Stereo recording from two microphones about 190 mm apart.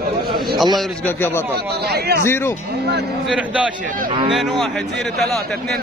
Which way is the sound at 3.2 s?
5° right (ahead or behind).